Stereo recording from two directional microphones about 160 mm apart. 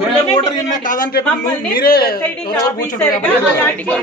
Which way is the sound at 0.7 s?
60° left (ahead or behind).